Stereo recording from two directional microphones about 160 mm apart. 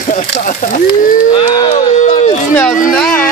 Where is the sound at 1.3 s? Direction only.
30° left (ahead or behind).